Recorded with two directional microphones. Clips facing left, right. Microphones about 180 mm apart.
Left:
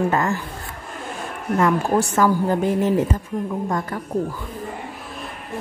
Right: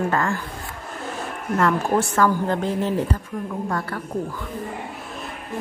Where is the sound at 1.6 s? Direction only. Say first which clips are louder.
Left 1 dB; 15° left (ahead or behind).